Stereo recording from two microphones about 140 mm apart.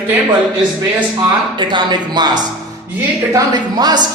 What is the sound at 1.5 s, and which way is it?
A man's voice, 30° right (ahead or behind).